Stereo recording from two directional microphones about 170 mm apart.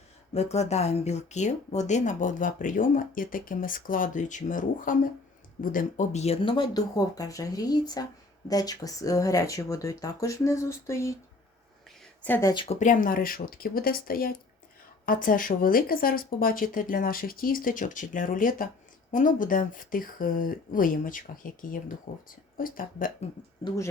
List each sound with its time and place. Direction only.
0.3 s speech: 40° left (ahead or behind); by 11.1 s 15° left (ahead or behind)
12.2 s speech: 10° left (ahead or behind)
12.6 s speech: 45° left (ahead or behind)
23.6 s speech: 20° left (ahead or behind)